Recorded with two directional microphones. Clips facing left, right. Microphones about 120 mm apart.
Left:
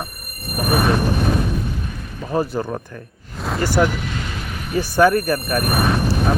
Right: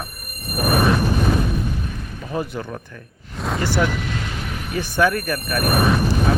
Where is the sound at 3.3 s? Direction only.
Centre (ahead or behind).